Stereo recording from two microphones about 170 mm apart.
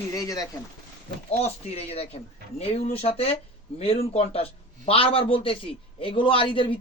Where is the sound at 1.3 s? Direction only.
40° left (ahead or behind).